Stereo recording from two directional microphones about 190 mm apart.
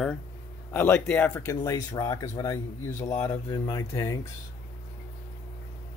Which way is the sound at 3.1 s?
20° left (ahead or behind).